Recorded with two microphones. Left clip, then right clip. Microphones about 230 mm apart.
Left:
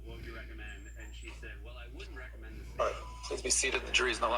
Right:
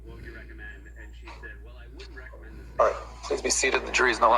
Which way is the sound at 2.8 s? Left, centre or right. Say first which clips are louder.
Right 10 dB; right.